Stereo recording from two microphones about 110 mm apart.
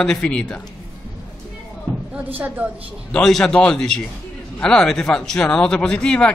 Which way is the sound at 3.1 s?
5° left (ahead or behind).